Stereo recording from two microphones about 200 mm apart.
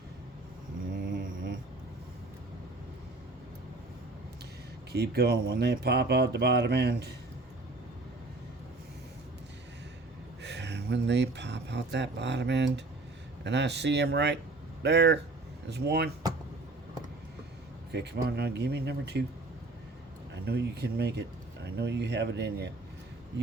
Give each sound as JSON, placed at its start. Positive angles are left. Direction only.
{"t": 0.9, "sound": "a sound", "side_deg": -45}
{"t": 4.9, "sound": "speech", "side_deg": -55}
{"t": 10.4, "sound": "speech", "side_deg": -60}
{"t": 17.9, "sound": "speech", "side_deg": -55}
{"t": 20.3, "sound": "speech", "side_deg": -55}